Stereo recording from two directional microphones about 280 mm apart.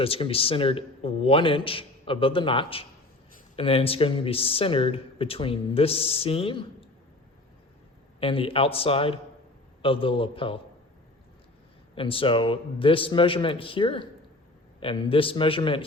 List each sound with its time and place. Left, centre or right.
0.0 s speech: centre
8.2 s speech: centre
11.9 s speech: centre